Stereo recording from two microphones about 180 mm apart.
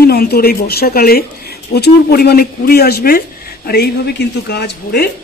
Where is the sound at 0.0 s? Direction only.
60° left (ahead or behind).